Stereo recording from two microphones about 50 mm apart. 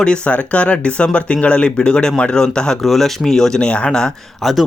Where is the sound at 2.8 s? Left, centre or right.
Centre.